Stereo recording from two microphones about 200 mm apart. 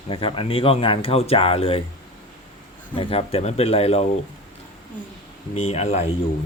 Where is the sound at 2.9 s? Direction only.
25° left (ahead or behind).